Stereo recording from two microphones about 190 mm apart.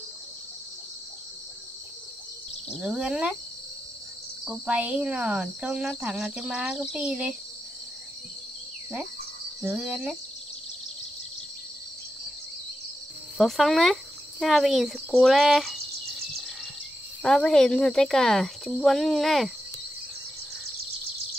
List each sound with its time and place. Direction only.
2.7 s speech: 5° right (ahead or behind)
4.5 s speech: 5° right (ahead or behind)
9.6 s speech: 5° right (ahead or behind)
13.4 s speech: centre (ahead or behind)
17.2 s speech: 5° left (ahead or behind)